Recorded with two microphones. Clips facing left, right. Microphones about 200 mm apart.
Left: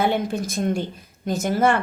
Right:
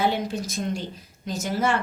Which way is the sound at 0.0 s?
55° left (ahead or behind).